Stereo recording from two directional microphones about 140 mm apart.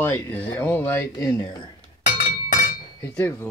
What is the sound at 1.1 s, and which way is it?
Speech, 25° left (ahead or behind).